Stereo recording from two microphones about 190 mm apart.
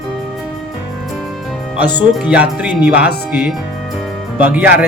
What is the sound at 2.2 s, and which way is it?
Speech, 5° right (ahead or behind).